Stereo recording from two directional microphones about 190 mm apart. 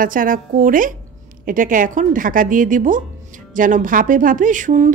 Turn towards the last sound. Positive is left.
turn(degrees=-40)  # may be behind; listen again after turning